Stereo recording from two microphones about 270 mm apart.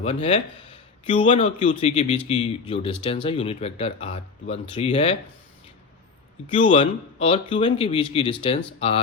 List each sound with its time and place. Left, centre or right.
0.0 s speech: left
6.5 s speech: left